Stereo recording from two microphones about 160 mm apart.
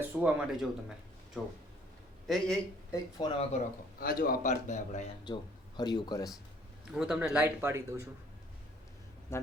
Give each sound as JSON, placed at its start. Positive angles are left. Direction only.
{"t": 0.0, "sound": "speech", "side_deg": -10}
{"t": 2.9, "sound": "speech", "side_deg": 30}
{"t": 4.0, "sound": "a man's voice", "side_deg": 65}
{"t": 4.7, "sound": "speech", "side_deg": 45}
{"t": 5.2, "sound": "speech", "side_deg": 25}
{"t": 6.9, "sound": "a man's voice", "side_deg": -5}
{"t": 9.3, "sound": "speech", "side_deg": 15}